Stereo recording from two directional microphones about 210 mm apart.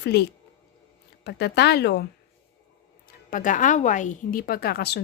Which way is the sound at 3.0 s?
40° left (ahead or behind).